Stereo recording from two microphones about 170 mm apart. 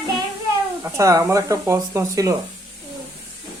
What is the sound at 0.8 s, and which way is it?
Speech, 20° right (ahead or behind).